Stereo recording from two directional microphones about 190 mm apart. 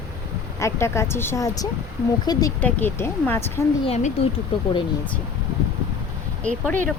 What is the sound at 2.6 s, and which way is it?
Speech, 10° left (ahead or behind).